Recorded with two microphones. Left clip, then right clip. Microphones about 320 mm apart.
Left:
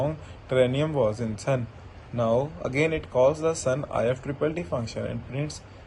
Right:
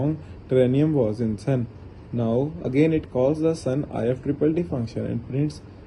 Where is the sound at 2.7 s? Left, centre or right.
Centre.